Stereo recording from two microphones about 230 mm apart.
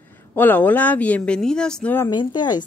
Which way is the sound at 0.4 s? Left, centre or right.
Centre.